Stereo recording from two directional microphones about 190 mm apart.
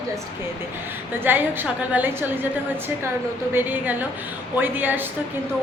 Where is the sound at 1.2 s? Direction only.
10° right (ahead or behind).